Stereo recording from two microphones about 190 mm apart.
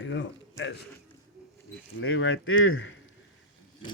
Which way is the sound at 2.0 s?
85° left.